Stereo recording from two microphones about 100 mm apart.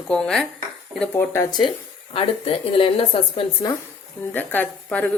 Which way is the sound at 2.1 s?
70° left (ahead or behind).